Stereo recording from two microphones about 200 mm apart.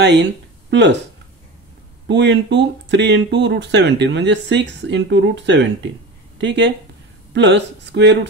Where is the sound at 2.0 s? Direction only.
60° right (ahead or behind).